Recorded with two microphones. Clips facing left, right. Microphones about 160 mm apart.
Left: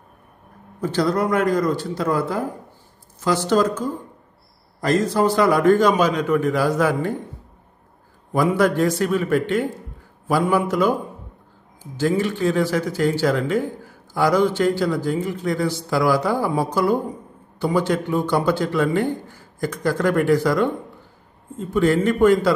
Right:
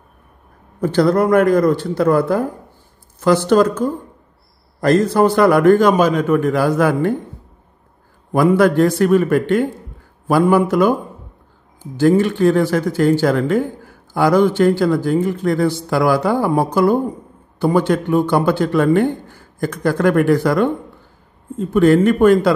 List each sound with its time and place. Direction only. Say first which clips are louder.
0.7 s speech: right 6 dB; 55° right (ahead or behind)
8.3 s speech: right 5 dB; 60° right (ahead or behind)
12.0 s speech: right 7 dB; 55° right (ahead or behind)
21.7 s speech: right 6 dB; 60° right (ahead or behind)